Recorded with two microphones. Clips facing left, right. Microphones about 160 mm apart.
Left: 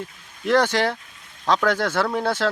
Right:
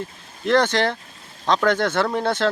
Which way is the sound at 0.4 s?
10° left (ahead or behind).